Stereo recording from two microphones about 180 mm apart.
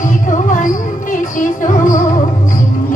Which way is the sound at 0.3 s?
45° left (ahead or behind).